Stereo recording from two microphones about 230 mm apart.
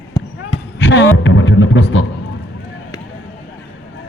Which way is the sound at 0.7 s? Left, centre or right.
Left.